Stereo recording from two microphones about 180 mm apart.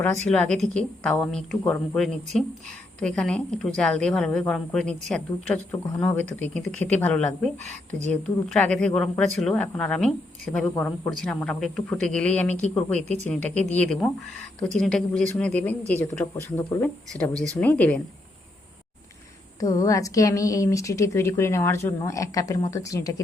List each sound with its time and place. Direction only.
0.3 s a woman's voice: 5° left (ahead or behind)
13.0 s speech: 40° right (ahead or behind)
14.6 s a woman's voice: 5° left (ahead or behind)
17.3 s speech: 20° right (ahead or behind)
17.6 s a woman's voice: 10° left (ahead or behind)
19.5 s a woman's voice: 20° left (ahead or behind)